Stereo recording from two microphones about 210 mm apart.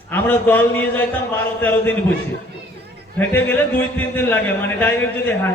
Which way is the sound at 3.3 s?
10° left (ahead or behind).